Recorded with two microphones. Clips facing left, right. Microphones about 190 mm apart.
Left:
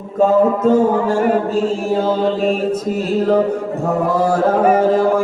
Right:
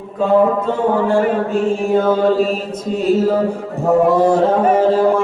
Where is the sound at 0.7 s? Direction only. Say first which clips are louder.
Left 2 dB; 40° left (ahead or behind).